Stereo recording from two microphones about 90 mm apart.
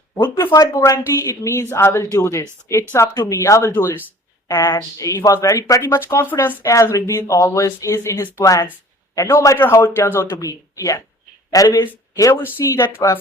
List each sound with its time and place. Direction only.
0.3 s speech: 35° left (ahead or behind)
4.4 s speech: 40° left (ahead or behind)
10.4 s speech: 40° left (ahead or behind)
12.6 s speech: 30° left (ahead or behind)